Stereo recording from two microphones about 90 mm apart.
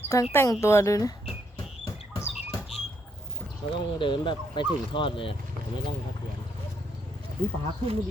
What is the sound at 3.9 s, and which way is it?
Speech, 65° left (ahead or behind).